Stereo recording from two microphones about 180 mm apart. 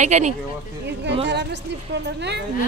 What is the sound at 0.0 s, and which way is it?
Speech, 40° right (ahead or behind).